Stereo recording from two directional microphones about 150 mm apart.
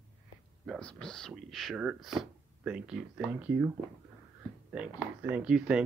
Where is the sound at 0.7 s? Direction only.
5° left (ahead or behind); by 3.7 s 10° right (ahead or behind).